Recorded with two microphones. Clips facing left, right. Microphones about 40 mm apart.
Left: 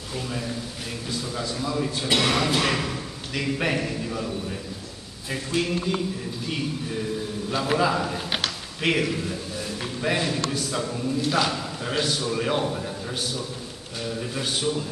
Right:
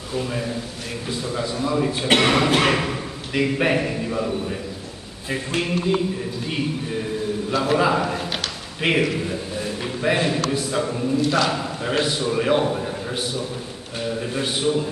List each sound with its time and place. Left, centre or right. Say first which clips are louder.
0.1 s a man's voice: right 5 dB; centre
5.6 s a man's voice: right 4 dB; centre
7.5 s a man's voice: right 4 dB; centre
7.8 s a man's voice: right 4 dB; centre
11.2 s a man's voice: right 2 dB; centre
12.0 s a man's voice: right 3 dB; centre